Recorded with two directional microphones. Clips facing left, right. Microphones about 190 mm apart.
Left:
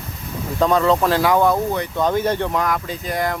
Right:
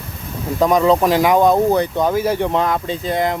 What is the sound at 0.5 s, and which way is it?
Speech, 15° right (ahead or behind).